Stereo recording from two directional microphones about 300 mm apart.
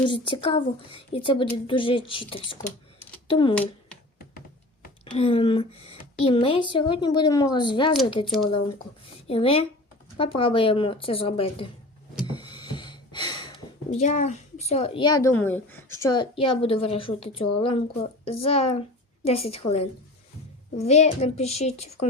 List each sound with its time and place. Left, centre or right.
0.0 s speech: centre
5.1 s a woman's voice: centre
12.2 s a sound: centre
13.9 s a woman's voice: left